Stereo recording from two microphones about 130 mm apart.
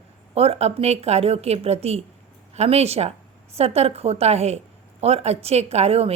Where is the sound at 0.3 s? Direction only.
50° right (ahead or behind).